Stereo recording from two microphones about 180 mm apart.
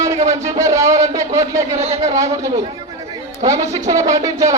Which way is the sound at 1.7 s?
35° right (ahead or behind).